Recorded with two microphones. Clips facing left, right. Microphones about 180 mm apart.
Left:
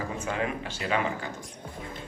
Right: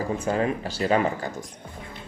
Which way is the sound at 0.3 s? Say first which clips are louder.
Right 6 dB; 35° right (ahead or behind).